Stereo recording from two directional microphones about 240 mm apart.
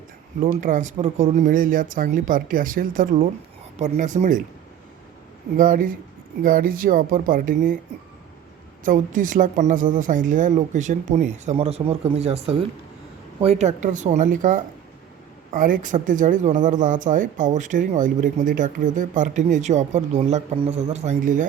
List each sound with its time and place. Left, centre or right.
0.4 s speech: right
5.5 s speech: right
8.8 s speech: right